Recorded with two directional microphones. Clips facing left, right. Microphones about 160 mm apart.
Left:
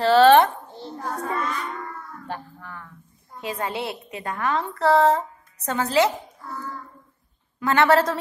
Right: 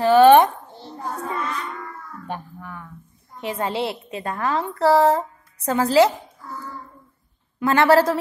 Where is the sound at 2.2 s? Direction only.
15° right (ahead or behind).